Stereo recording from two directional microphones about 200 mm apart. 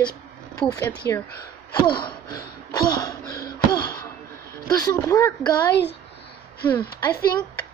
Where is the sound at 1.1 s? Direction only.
15° left (ahead or behind).